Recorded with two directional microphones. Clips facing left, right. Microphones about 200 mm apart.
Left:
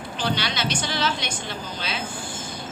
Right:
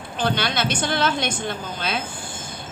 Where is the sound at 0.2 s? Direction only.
50° right (ahead or behind).